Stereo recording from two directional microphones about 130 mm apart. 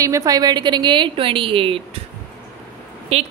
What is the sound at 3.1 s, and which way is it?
Speech, 50° right (ahead or behind).